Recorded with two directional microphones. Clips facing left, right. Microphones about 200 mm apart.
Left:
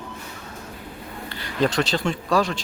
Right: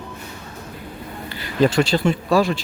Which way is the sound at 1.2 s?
5° right (ahead or behind).